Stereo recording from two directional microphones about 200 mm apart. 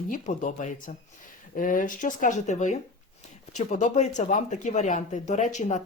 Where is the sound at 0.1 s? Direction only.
40° left (ahead or behind).